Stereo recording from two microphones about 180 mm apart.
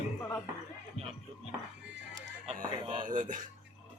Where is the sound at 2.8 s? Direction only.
30° right (ahead or behind).